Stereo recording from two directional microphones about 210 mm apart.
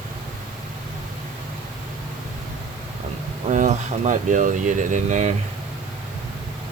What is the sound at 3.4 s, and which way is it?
Speech, 35° right (ahead or behind).